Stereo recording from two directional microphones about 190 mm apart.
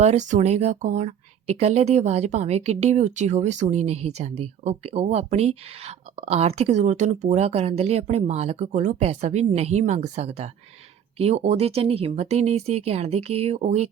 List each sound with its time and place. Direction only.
0.0 s speech: 40° right (ahead or behind)